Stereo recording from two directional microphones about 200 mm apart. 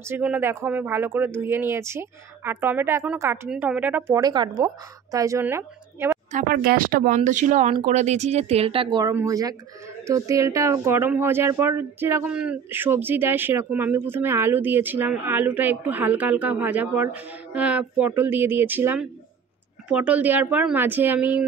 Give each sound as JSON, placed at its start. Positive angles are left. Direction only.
{"t": 0.0, "sound": "speech", "side_deg": -10}
{"t": 6.3, "sound": "speech", "side_deg": -45}